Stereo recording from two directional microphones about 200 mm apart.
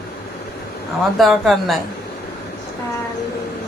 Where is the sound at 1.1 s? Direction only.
Centre (ahead or behind).